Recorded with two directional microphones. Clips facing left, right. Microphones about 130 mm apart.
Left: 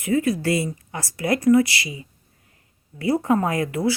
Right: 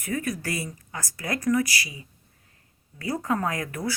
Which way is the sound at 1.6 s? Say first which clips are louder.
Left 2 dB; 40° right (ahead or behind).